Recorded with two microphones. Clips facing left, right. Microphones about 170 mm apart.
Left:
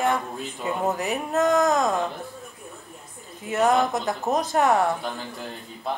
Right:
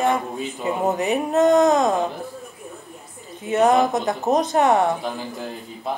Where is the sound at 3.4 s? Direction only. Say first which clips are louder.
Right 4 dB; 20° right (ahead or behind).